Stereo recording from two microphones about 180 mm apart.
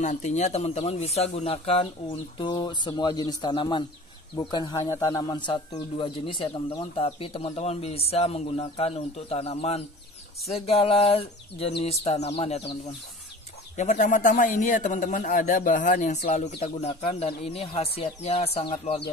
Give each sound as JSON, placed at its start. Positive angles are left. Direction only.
{"t": 0.0, "sound": "speech", "side_deg": 40}
{"t": 13.7, "sound": "a man's voice", "side_deg": 40}
{"t": 16.3, "sound": "speech", "side_deg": 35}